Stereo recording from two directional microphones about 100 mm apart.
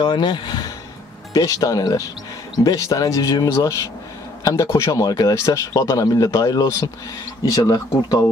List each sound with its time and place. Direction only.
0.0 s speech: 50° left (ahead or behind)
1.3 s speech: 35° left (ahead or behind)